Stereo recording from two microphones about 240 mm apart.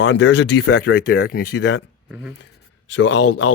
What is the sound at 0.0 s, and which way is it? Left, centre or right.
Speech, left.